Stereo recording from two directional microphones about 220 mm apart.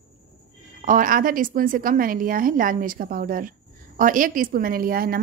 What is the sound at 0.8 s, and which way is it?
Speech, 35° right (ahead or behind).